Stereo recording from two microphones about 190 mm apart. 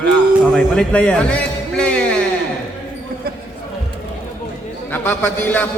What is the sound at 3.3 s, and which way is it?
Basketball bounce, 55° right (ahead or behind).